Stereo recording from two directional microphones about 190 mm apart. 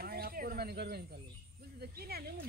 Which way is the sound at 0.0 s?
50° right (ahead or behind).